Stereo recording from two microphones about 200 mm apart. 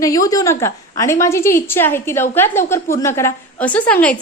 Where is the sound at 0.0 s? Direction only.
15° left (ahead or behind).